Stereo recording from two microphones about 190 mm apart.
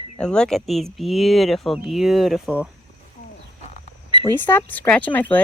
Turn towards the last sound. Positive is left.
turn(degrees=10)  # may be behind; listen again after turning